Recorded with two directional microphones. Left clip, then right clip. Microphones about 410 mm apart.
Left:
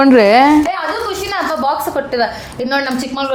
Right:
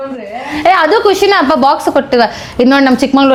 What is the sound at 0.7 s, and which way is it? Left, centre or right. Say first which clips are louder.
A woman's voice: right 11 dB; right.